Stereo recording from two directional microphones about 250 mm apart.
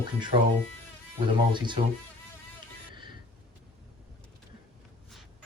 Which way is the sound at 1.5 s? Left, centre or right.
Centre.